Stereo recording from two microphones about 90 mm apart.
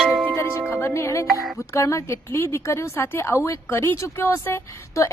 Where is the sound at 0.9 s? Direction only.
35° left (ahead or behind).